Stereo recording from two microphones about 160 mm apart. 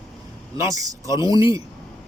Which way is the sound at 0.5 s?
20° right (ahead or behind).